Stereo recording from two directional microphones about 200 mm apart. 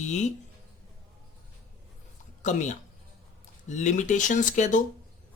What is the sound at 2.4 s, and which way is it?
Speech, 35° left (ahead or behind).